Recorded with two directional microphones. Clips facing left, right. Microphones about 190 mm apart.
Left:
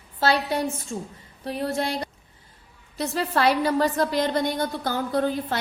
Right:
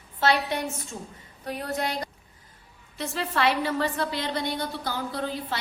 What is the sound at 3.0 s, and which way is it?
A woman's voice, 40° left (ahead or behind).